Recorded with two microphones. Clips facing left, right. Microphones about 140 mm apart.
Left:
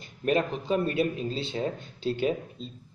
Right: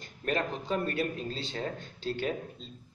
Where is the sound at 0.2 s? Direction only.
15° left (ahead or behind).